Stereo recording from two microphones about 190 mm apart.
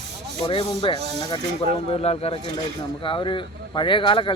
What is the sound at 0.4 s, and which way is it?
A man's voice, 25° left (ahead or behind).